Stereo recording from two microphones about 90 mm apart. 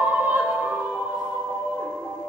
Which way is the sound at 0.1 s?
20° right (ahead or behind).